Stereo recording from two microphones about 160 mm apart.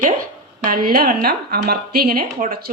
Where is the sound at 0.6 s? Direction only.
60° right (ahead or behind).